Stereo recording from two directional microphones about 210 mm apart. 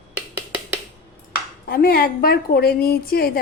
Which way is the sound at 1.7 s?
45° left (ahead or behind).